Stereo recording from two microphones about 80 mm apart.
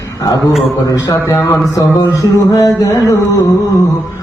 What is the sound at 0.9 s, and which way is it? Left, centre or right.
A man's voice, left.